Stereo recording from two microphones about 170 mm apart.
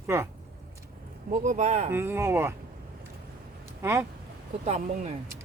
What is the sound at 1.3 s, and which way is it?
Speech, 45° right (ahead or behind).